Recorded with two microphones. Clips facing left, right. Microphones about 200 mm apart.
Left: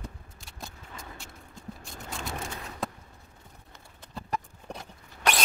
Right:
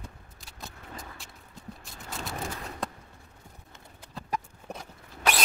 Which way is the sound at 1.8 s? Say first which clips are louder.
Even; centre (ahead or behind).